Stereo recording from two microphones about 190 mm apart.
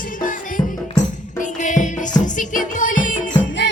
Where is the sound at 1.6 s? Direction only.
40° left (ahead or behind).